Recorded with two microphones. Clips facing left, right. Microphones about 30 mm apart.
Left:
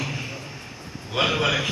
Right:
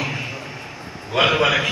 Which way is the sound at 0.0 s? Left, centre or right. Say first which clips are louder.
Right 5 dB; right.